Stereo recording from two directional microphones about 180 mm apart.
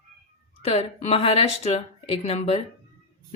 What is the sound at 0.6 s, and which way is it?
A woman's voice, 35° left (ahead or behind).